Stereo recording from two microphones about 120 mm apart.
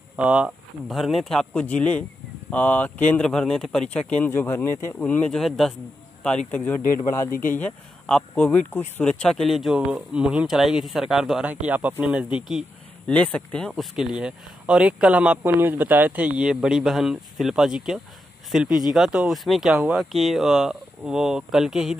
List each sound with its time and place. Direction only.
0.1 s speech: 10° right (ahead or behind)
0.9 s speech: centre (ahead or behind); by 5.0 s 20° left (ahead or behind)
5.0 s speech: 10° left (ahead or behind)
13.0 s speech: 10° left (ahead or behind)
13.9 s speech: 5° right (ahead or behind)
18.7 s speech: 35° left (ahead or behind)
18.9 s speech: 5° right (ahead or behind)